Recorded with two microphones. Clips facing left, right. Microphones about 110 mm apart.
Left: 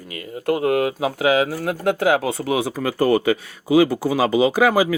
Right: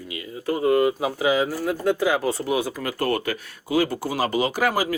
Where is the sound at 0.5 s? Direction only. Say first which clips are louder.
Right 2 dB; 85° left.